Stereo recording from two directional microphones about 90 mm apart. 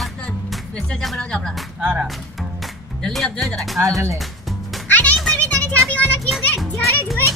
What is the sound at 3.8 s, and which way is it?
Speech, 35° right (ahead or behind).